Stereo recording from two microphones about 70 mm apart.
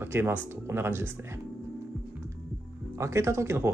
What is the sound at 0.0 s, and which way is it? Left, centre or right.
Speech, right.